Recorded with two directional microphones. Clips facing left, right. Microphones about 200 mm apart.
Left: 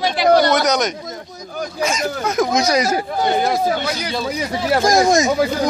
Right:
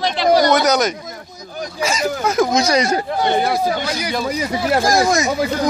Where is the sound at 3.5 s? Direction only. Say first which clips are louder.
Even; 5° right (ahead or behind).